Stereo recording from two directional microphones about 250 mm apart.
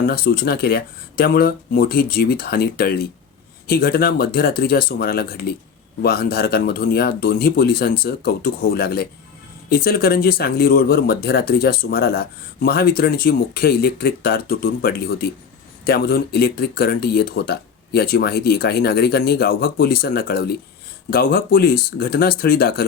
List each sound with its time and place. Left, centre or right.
0.0 s speech: left